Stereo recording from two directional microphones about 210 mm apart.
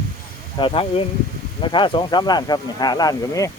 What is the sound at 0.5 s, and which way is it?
Speech, 25° left (ahead or behind).